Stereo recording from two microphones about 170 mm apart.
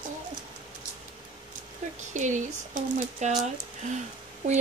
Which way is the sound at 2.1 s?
45° right (ahead or behind).